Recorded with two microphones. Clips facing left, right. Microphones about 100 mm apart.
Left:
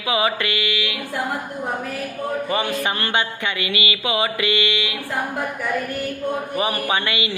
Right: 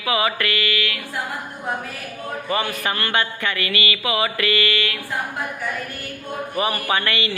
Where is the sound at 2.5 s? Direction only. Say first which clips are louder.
Right 2 dB; 25° left (ahead or behind).